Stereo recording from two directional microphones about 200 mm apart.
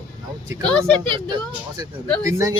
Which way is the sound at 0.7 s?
5° left (ahead or behind).